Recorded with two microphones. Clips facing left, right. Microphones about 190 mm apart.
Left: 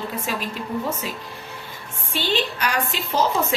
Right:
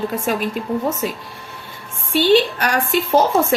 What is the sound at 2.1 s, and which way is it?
A woman's voice, 50° right (ahead or behind).